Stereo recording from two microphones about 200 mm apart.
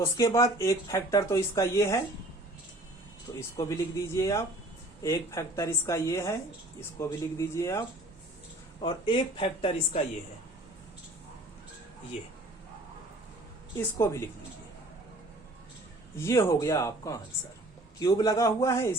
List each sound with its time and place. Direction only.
0.0 s speech: 15° left (ahead or behind)
3.3 s speech: 20° left (ahead or behind)
14.0 s speech: 15° left (ahead or behind)
16.1 s speech: 15° left (ahead or behind)